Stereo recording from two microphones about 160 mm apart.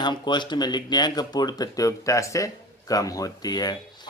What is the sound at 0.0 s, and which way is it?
Speech, 30° left (ahead or behind).